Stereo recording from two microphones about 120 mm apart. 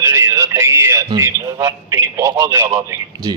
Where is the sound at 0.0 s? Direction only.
25° right (ahead or behind).